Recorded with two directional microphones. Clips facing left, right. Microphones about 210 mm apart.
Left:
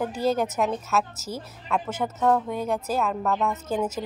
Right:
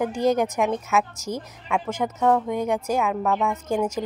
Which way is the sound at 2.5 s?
15° right (ahead or behind).